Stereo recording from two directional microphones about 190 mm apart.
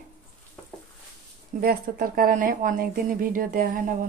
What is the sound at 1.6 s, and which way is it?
Speech, 50° right (ahead or behind).